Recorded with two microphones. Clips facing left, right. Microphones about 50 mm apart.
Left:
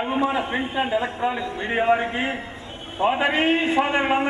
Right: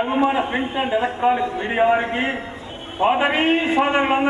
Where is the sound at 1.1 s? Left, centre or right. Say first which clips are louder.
Right 6 dB; right.